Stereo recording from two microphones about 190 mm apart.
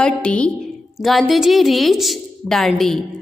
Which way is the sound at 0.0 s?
5° left (ahead or behind).